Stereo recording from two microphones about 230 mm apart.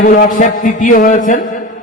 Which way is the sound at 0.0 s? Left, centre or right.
Left.